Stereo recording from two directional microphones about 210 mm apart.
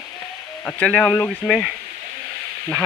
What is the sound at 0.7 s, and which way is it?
Speech, 5° left (ahead or behind).